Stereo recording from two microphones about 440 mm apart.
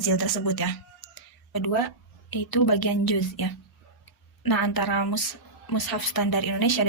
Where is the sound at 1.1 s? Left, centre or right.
Left.